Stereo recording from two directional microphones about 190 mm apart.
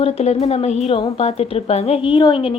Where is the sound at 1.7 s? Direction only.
30° left (ahead or behind).